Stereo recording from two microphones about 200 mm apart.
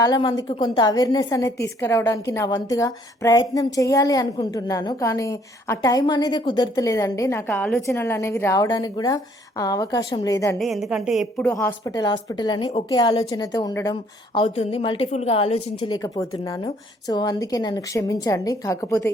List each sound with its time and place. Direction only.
0.0 s a woman's voice: 20° left (ahead or behind)
10.6 s a woman's voice: centre (ahead or behind)
11.5 s a woman's voice: 15° left (ahead or behind)
15.9 s a woman's voice: 15° left (ahead or behind)